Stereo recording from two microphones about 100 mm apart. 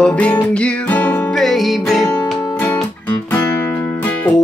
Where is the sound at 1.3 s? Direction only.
Centre (ahead or behind).